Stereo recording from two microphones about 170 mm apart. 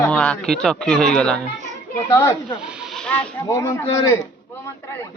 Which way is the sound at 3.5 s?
15° left (ahead or behind).